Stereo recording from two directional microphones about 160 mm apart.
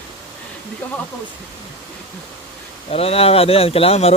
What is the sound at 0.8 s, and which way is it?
Speech, 10° left (ahead or behind).